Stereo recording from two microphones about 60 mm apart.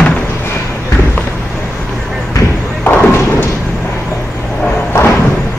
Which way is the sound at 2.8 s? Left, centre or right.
Left.